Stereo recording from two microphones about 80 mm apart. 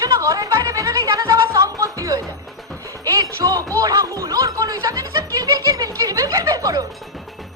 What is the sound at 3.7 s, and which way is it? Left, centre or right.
Music, right.